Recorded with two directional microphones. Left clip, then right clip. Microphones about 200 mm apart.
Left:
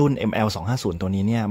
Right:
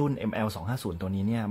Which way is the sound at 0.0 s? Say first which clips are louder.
Left 8 dB; 40° left (ahead or behind).